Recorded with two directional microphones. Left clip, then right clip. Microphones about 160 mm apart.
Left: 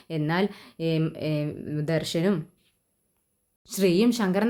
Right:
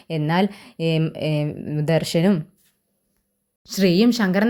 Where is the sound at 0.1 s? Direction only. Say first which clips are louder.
Right 5 dB; 30° right (ahead or behind).